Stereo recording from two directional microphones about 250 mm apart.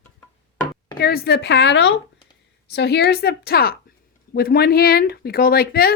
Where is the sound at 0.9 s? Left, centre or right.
Left.